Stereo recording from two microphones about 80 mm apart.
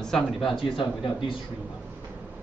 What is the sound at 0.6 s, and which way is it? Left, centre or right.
Speech, left.